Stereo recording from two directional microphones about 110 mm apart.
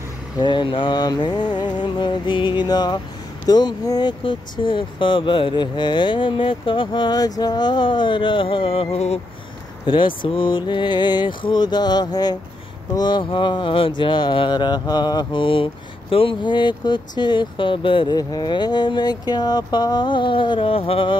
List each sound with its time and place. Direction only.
0.4 s speech: 45° left (ahead or behind)
4.2 s speech: 50° left (ahead or behind); by 9.2 s 70° left (ahead or behind)
9.8 s speech: 50° left (ahead or behind)
18.1 s speech: 35° left (ahead or behind); by 21.2 s 55° left (ahead or behind)